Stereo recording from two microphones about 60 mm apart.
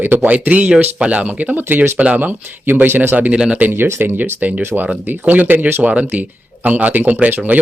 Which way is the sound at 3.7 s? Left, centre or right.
Right.